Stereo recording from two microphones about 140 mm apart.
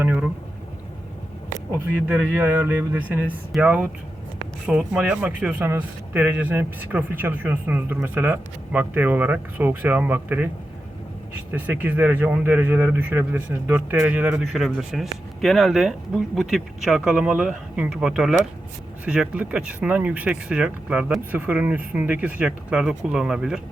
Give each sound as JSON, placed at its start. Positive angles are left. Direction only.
{"t": 0.0, "sound": "a sound", "side_deg": -10}
{"t": 2.0, "sound": "speech", "side_deg": -15}
{"t": 11.5, "sound": "speech", "side_deg": -10}